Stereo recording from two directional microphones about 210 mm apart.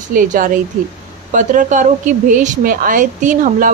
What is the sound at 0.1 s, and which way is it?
A woman's voice, 40° right (ahead or behind).